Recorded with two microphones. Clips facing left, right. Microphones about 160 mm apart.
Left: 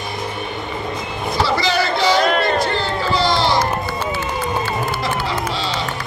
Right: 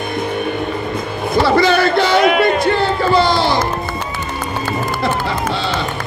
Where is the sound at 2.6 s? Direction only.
55° right (ahead or behind).